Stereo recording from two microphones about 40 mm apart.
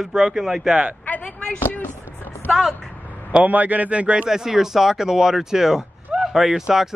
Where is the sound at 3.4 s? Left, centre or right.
Right.